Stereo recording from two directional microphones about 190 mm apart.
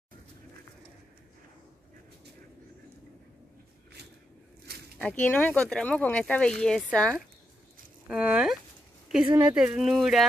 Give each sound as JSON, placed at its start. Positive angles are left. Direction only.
{"t": 4.9, "sound": "speech", "side_deg": 5}
{"t": 8.1, "sound": "speech", "side_deg": -5}
{"t": 9.2, "sound": "speech", "side_deg": -20}
{"t": 9.6, "sound": "speech", "side_deg": -5}